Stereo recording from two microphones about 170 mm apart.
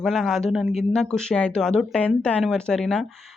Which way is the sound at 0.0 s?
Centre (ahead or behind).